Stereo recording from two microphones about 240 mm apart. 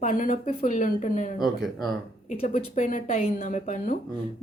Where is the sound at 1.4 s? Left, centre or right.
Centre.